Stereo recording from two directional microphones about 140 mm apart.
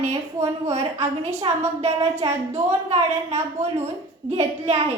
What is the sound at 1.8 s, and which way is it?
A woman's voice, 45° right (ahead or behind).